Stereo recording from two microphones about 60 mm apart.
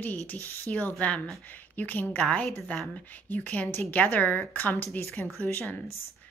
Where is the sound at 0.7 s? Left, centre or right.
Left.